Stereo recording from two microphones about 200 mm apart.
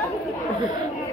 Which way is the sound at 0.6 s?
15° right (ahead or behind).